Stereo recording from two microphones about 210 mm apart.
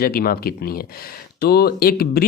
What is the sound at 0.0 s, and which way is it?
Speech, 45° left (ahead or behind).